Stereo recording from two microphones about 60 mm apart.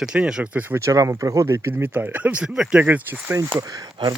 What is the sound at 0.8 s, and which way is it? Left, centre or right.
Speech, right.